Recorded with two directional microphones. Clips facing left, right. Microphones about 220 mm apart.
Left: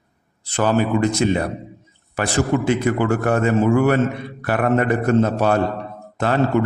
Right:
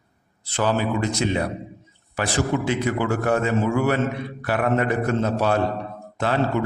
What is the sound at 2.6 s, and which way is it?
A man's voice, 50° left (ahead or behind).